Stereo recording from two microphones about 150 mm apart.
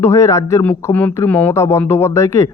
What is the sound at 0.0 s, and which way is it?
Speech, 20° left (ahead or behind).